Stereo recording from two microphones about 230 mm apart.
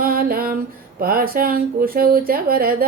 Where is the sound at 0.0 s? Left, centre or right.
Right.